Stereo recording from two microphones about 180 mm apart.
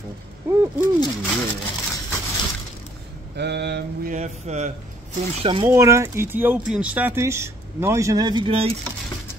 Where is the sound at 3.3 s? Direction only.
70° right (ahead or behind).